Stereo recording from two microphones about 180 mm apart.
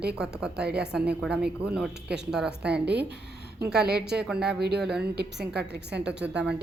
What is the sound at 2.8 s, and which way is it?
A woman's voice, 65° right (ahead or behind).